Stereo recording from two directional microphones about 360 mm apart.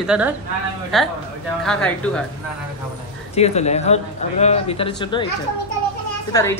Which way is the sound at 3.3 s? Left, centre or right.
Centre.